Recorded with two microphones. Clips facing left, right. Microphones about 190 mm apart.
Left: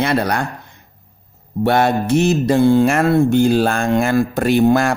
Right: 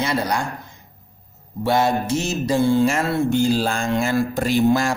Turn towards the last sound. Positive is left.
turn(degrees=60)  # may be behind; listen again after turning